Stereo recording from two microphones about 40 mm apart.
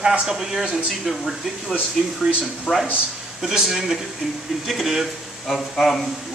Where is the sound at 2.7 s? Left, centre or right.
Right.